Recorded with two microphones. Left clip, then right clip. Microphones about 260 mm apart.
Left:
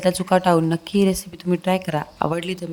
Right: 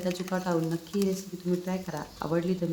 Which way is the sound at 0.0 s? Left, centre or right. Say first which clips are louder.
Left 14 dB; left.